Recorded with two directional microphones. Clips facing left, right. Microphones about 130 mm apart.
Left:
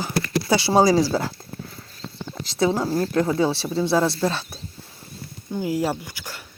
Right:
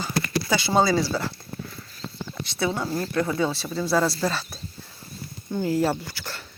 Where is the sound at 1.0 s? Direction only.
40° left (ahead or behind).